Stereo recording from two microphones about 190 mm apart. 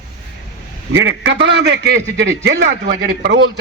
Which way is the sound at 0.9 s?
80° right.